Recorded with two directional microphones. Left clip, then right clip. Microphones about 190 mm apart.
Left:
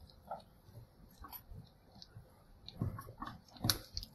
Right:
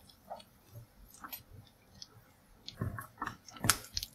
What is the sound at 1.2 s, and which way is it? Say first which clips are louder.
Chewing: right 5 dB; 50° right (ahead or behind).